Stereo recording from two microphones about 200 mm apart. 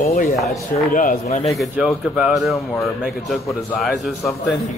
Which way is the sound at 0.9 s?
40° left (ahead or behind).